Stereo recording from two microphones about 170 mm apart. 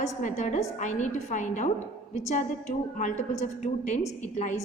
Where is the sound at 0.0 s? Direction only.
50° left (ahead or behind).